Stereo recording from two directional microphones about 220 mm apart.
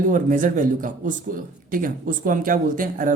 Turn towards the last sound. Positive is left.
turn(degrees=-40)  # may be behind; listen again after turning